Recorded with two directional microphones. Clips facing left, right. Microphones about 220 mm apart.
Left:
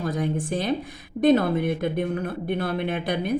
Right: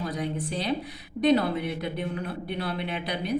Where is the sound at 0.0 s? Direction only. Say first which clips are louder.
Left 4 dB; 50° left (ahead or behind).